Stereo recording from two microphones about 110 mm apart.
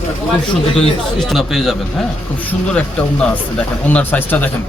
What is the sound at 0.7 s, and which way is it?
Speech, centre (ahead or behind).